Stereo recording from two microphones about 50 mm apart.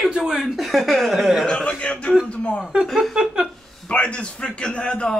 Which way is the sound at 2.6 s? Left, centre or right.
Centre.